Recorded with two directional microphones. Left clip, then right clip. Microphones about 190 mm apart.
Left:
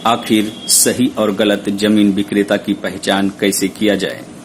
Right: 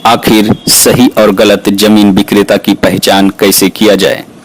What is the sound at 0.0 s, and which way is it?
Speech, 50° right (ahead or behind).